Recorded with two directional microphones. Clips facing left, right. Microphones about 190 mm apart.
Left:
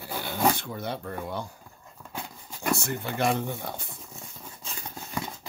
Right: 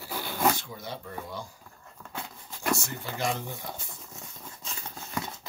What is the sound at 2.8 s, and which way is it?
Speech, 60° left (ahead or behind).